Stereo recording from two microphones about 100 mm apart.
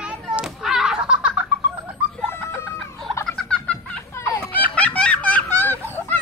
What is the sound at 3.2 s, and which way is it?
Fowl, 5° left (ahead or behind).